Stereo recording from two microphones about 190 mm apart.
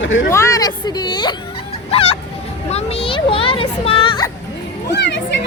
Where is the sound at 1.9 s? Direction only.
30° left (ahead or behind).